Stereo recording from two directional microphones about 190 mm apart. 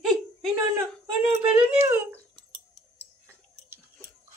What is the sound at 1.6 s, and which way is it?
Speech, 5° right (ahead or behind).